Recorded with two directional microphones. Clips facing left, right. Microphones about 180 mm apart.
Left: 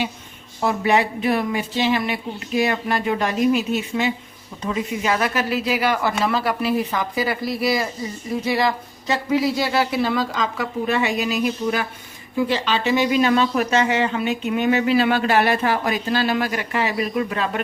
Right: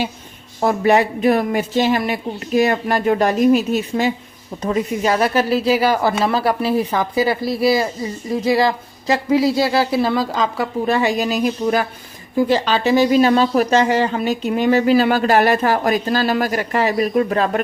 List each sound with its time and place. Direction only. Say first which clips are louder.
0.6 s speech: right 4 dB; 45° right (ahead or behind)